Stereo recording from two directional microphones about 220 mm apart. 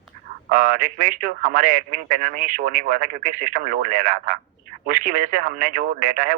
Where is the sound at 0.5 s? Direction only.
35° right (ahead or behind).